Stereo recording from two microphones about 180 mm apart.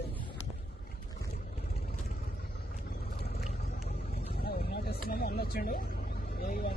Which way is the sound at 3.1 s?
55° left (ahead or behind).